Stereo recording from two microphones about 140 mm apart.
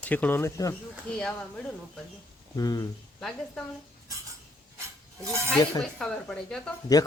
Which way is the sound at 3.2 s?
Centre (ahead or behind).